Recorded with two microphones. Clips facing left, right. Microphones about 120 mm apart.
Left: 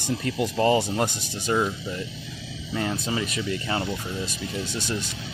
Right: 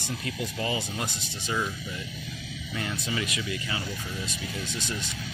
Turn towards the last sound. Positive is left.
turn(degrees=35)  # may be behind; listen again after turning